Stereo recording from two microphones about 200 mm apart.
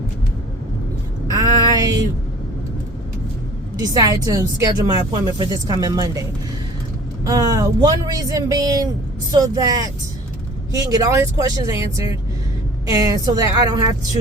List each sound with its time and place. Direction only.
1.3 s a sound: 20° right (ahead or behind)
3.9 s speech: 20° right (ahead or behind)
7.3 s speech: 20° right (ahead or behind)